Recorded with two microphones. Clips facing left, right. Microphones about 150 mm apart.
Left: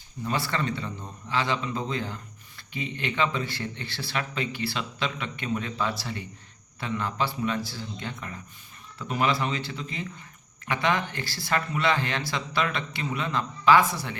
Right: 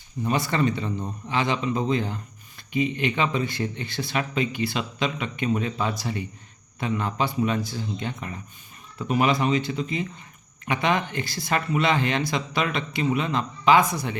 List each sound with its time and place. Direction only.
0.3 s a man's voice: 20° right (ahead or behind)